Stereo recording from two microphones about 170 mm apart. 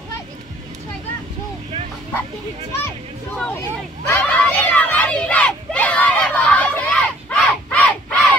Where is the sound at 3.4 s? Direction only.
15° left (ahead or behind).